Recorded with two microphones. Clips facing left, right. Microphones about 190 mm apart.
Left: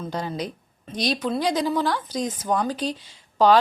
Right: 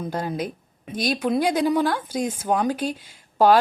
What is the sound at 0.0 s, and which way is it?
Speech, 10° right (ahead or behind).